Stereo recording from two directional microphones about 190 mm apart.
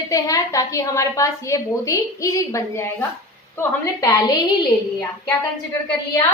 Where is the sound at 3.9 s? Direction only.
15° left (ahead or behind).